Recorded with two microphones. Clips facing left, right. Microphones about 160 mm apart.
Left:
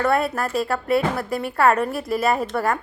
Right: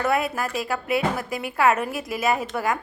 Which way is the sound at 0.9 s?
30° left (ahead or behind).